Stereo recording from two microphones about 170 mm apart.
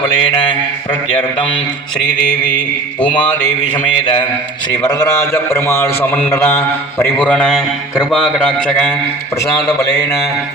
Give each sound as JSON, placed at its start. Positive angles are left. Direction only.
{"t": 3.0, "sound": "a man's voice", "side_deg": 30}
{"t": 4.8, "sound": "a sound", "side_deg": 20}
{"t": 8.1, "sound": "a man's voice", "side_deg": 5}
{"t": 9.6, "sound": "a man's voice", "side_deg": 20}